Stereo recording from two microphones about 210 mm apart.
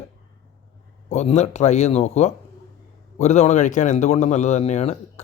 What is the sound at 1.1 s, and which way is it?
Speech, 30° left (ahead or behind).